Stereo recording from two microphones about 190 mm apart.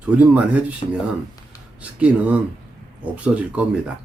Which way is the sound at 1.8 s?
5° right (ahead or behind).